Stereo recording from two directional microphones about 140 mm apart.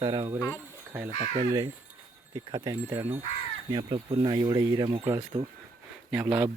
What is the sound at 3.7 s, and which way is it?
Speech, 35° right (ahead or behind).